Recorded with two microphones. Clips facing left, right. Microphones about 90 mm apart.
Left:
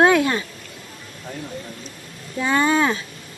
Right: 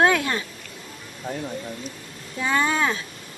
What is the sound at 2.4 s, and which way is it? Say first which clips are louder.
Speech: left 4 dB; 5° left (ahead or behind).